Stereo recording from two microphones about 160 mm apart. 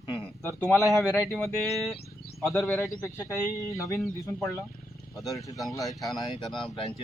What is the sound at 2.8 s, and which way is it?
Speech, 15° left (ahead or behind).